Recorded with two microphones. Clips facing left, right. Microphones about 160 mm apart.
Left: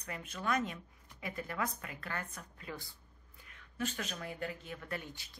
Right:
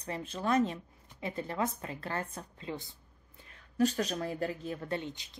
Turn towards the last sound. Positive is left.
turn(degrees=-20)  # may be behind; listen again after turning